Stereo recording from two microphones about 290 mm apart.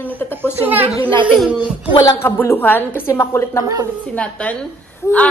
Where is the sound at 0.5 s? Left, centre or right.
Centre.